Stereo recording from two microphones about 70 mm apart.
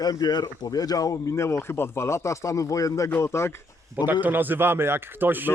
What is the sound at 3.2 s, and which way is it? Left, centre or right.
Speech, left.